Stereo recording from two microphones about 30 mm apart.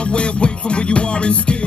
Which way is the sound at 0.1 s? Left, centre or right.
Left.